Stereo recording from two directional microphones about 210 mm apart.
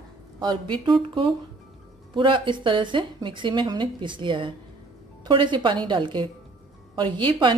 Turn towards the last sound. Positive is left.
turn(degrees=-20)  # may be behind; listen again after turning